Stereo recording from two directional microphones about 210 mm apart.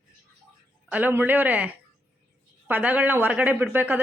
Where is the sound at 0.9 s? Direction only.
10° right (ahead or behind).